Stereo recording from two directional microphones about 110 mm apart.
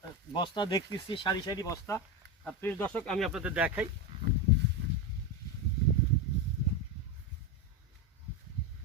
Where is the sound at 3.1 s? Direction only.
Centre (ahead or behind).